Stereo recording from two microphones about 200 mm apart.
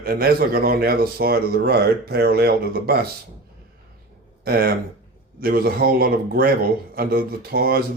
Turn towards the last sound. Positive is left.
turn(degrees=-50)  # may be behind; listen again after turning